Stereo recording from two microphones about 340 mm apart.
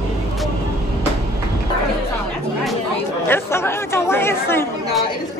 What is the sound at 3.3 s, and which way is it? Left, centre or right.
Chatter, centre.